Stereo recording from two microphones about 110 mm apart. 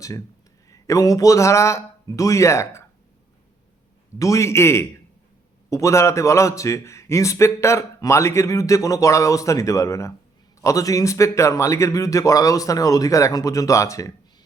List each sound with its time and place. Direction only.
0.7 s a man's voice: 30° left (ahead or behind)
4.2 s a man's voice: 25° left (ahead or behind)